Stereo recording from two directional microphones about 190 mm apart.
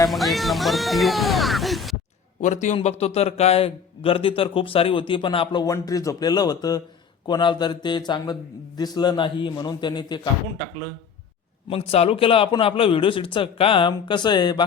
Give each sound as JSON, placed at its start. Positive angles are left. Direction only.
{"t": 0.1, "sound": "speech", "side_deg": 0}
{"t": 2.4, "sound": "a man's voice", "side_deg": 40}
{"t": 11.7, "sound": "a man's voice", "side_deg": 30}